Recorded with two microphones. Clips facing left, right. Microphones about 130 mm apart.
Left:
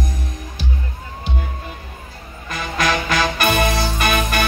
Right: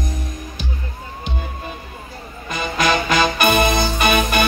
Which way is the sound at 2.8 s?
10° right (ahead or behind).